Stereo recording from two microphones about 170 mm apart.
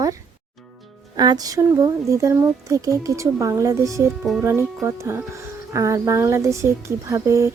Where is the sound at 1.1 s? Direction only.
25° right (ahead or behind).